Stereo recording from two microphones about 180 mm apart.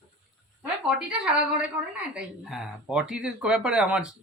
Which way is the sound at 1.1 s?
5° right (ahead or behind).